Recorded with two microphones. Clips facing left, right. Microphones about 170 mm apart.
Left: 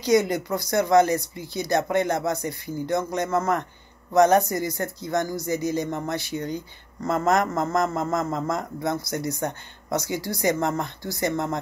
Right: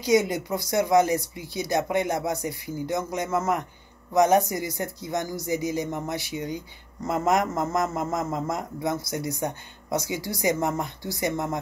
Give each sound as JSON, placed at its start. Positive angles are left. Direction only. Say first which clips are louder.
{"t": 0.0, "sound": "a man's voice", "louder": "left 1 dB", "side_deg": -20}